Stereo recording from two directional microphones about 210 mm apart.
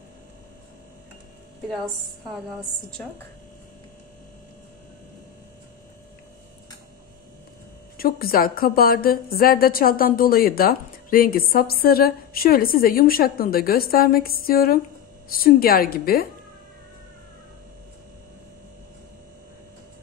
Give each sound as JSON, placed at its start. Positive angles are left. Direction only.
{"t": 8.0, "sound": "a woman's voice", "side_deg": 45}